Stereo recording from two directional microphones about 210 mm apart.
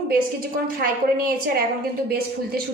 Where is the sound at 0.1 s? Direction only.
45° right (ahead or behind).